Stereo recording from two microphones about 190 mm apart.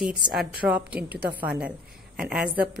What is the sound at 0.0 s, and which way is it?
A woman's voice, 5° right (ahead or behind).